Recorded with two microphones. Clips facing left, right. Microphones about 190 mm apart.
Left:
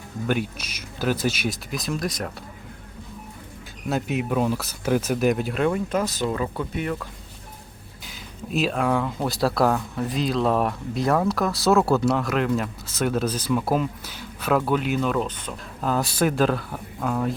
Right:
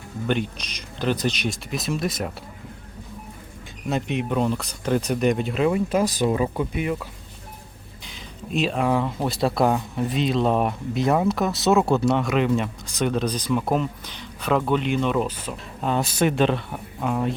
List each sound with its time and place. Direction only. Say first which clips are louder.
0.3 s speech: right 1 dB; 5° left (ahead or behind)
3.8 s speech: even; 5° left (ahead or behind)
8.0 s speech: left 1 dB; centre (ahead or behind)
9.6 s speech: right 1 dB; 20° right (ahead or behind)
10.1 s speech: right 1 dB; centre (ahead or behind)